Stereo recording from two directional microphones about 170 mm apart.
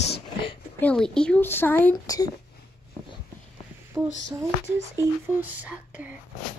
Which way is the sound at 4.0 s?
10° right (ahead or behind).